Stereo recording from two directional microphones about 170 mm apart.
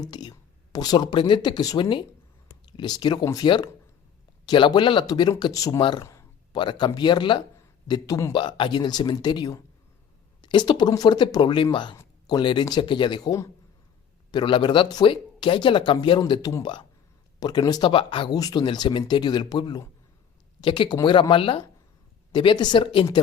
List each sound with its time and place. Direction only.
0.0 s speech: 25° left (ahead or behind)